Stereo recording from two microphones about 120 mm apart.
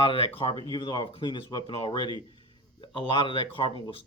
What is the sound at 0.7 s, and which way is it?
Speech, 40° left (ahead or behind).